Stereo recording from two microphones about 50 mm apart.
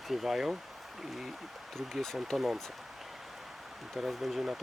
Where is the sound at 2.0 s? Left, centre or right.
Centre.